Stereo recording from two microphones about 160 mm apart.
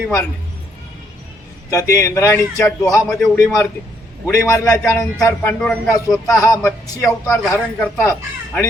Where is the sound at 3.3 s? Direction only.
20° left (ahead or behind).